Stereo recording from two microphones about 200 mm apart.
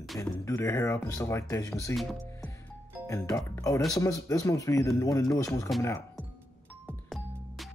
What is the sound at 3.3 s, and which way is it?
Speech, 15° left (ahead or behind).